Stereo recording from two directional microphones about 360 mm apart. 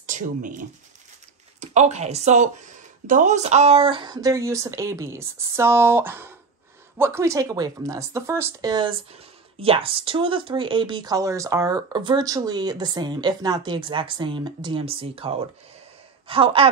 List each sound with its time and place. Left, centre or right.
0.0 s speech: right